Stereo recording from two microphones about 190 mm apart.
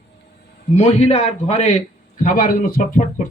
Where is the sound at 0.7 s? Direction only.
35° left (ahead or behind).